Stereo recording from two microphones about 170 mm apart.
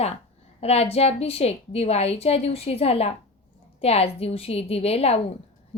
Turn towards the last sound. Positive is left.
turn(degrees=35)  # may be behind; listen again after turning